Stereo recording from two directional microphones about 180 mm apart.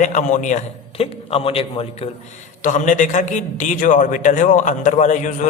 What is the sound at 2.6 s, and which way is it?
A man's voice, 45° left (ahead or behind).